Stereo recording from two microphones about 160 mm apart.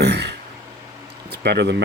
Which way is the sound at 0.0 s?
90° right.